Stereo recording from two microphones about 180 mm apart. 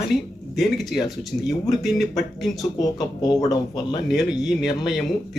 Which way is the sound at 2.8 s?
20° left (ahead or behind).